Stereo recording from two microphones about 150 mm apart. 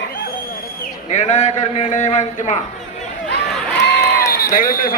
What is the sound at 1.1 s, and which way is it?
A man's voice, 50° left (ahead or behind).